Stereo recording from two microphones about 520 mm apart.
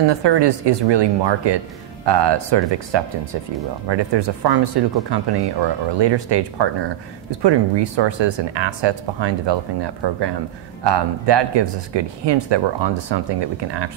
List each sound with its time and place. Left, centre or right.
0.1 s speech: right